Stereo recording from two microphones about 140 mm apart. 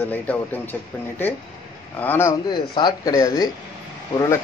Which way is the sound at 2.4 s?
30° left (ahead or behind).